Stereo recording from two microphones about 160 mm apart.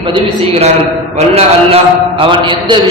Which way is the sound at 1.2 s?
40° right (ahead or behind).